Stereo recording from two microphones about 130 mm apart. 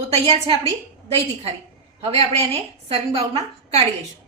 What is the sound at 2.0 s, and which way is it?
A woman's voice, 50° right (ahead or behind).